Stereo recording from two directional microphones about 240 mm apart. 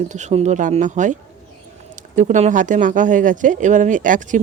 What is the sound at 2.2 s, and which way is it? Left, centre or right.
Speech, right.